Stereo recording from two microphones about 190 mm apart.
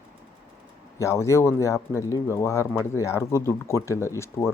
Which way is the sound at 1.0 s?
15° left (ahead or behind).